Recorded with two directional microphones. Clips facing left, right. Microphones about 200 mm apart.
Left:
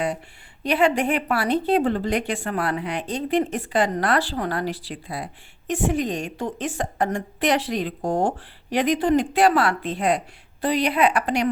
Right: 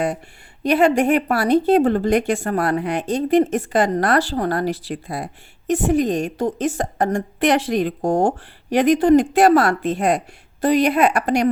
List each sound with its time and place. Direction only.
0.6 s speech: 40° right (ahead or behind)